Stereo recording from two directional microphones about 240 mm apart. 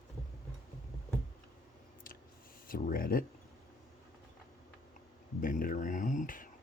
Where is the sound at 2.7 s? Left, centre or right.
Left.